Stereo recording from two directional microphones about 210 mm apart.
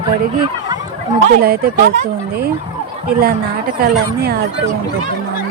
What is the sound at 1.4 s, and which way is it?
Speech, 45° right (ahead or behind).